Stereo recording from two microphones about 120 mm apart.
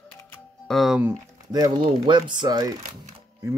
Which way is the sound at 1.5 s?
35° right (ahead or behind).